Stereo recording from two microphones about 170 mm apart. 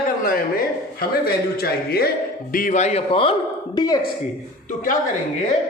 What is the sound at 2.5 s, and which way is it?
A man's voice, 50° left (ahead or behind).